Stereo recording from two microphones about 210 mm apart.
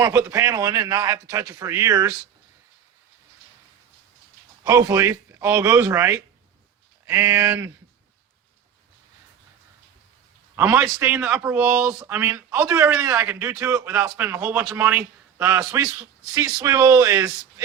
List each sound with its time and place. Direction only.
0.0 s a man's voice: 10° right (ahead or behind)
4.6 s a man's voice: 15° right (ahead or behind)
10.6 s a man's voice: 10° right (ahead or behind)